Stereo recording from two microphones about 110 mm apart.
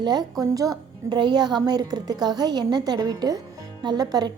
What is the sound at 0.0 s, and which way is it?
A woman's voice, 40° right (ahead or behind).